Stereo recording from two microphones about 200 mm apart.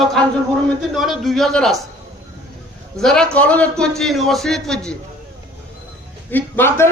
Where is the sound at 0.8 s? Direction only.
Centre (ahead or behind).